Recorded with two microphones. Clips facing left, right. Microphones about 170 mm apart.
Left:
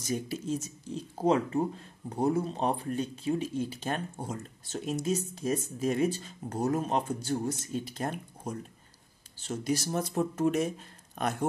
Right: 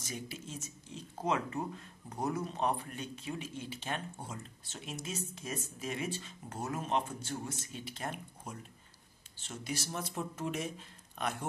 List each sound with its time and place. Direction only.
0.0 s speech: 40° left (ahead or behind)